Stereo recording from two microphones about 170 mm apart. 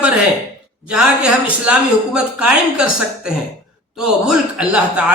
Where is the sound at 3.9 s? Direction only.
5° right (ahead or behind).